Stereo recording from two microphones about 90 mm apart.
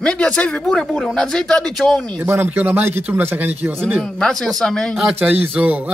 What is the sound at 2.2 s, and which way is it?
A man's voice, 25° right (ahead or behind).